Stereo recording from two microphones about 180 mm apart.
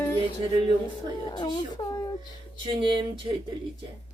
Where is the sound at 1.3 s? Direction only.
25° left (ahead or behind).